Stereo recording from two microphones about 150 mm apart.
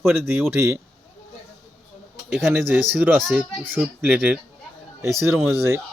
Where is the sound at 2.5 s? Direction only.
10° right (ahead or behind).